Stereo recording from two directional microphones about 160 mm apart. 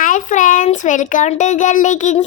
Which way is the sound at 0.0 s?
50° left (ahead or behind).